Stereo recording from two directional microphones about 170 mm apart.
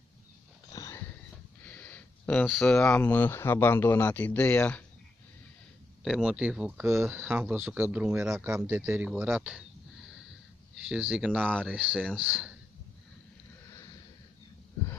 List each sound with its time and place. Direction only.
0.7 s a sound: 20° left (ahead or behind)
1.7 s speech: 10° left (ahead or behind)
6.0 s speech: 5° right (ahead or behind)
10.9 s speech: 10° right (ahead or behind)
11.2 s speech: 5° left (ahead or behind)
12.2 s speech: 10° right (ahead or behind)